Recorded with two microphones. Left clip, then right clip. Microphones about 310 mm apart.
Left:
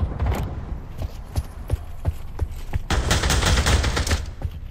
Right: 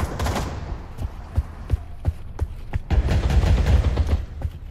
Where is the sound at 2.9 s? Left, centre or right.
Left.